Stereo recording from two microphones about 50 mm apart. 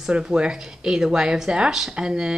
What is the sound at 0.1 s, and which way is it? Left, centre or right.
Speech, centre.